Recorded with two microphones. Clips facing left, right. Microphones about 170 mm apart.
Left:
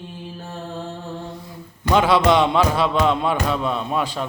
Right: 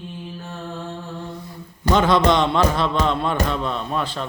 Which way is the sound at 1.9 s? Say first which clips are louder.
Left 1 dB; 10° left (ahead or behind).